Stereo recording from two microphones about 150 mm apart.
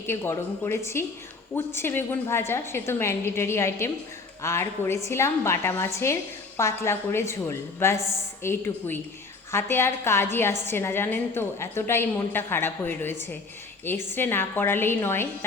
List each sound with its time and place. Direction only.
0.1 s a woman's voice: 15° left (ahead or behind)